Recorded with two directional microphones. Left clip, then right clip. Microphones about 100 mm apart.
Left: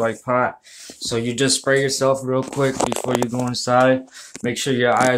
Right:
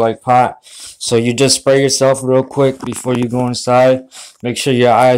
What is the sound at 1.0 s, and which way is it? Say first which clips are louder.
Speech: right 8 dB; 65° right (ahead or behind).